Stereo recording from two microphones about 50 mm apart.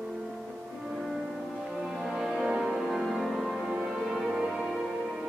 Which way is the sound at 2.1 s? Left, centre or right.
Centre.